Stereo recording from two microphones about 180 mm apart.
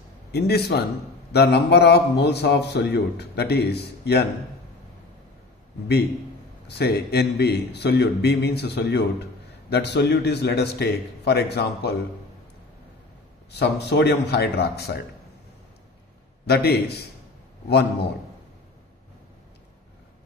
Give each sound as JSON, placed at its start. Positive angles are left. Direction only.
{"t": 0.3, "sound": "a man's voice", "side_deg": 65}
{"t": 6.7, "sound": "a man's voice", "side_deg": 65}
{"t": 13.5, "sound": "a man's voice", "side_deg": 70}
{"t": 16.4, "sound": "a man's voice", "side_deg": 65}